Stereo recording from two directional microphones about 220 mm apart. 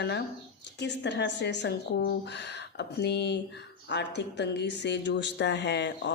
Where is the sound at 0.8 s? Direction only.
50° left (ahead or behind).